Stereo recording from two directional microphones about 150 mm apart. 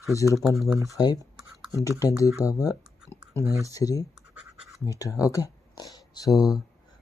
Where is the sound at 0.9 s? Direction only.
25° left (ahead or behind).